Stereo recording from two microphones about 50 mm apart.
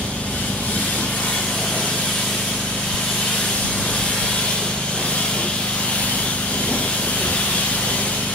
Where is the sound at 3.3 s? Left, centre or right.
Left.